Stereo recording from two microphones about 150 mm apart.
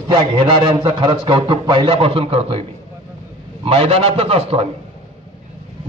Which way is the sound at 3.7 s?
40° right (ahead or behind).